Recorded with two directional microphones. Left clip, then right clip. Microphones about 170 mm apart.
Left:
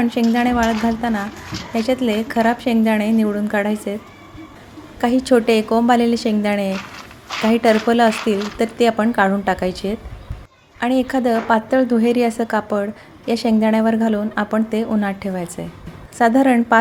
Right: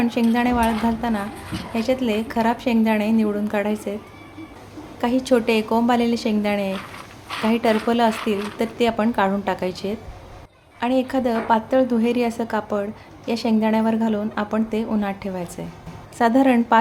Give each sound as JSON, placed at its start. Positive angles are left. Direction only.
{"t": 0.0, "sound": "a woman's voice", "side_deg": 15}
{"t": 4.9, "sound": "a woman's voice", "side_deg": 20}